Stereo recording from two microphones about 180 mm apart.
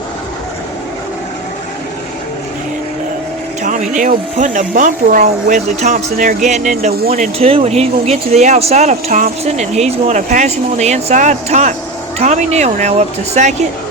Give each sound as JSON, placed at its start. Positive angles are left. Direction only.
{"t": 3.6, "sound": "speech", "side_deg": -45}